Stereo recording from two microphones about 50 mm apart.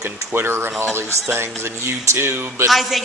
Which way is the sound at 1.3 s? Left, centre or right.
Right.